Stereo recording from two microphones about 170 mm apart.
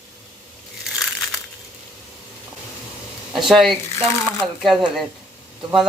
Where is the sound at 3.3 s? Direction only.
Centre (ahead or behind).